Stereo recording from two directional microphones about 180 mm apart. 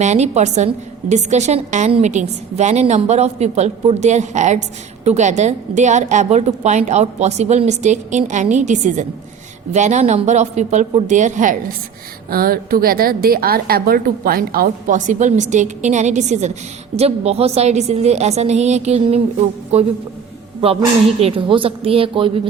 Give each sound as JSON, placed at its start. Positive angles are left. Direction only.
{"t": 0.0, "sound": "a woman's voice", "side_deg": -40}
{"t": 12.3, "sound": "a woman's voice", "side_deg": -55}
{"t": 21.2, "sound": "a woman's voice", "side_deg": -30}